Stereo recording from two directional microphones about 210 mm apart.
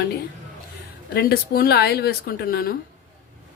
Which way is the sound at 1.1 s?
45° left (ahead or behind).